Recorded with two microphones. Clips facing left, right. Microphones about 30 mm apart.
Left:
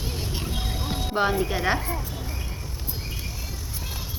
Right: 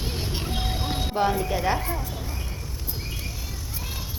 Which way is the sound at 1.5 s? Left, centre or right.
Left.